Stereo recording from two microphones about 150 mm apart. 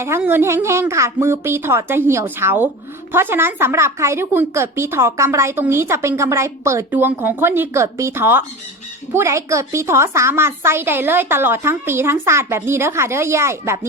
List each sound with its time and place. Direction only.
0.2 s speech: 15° right (ahead or behind)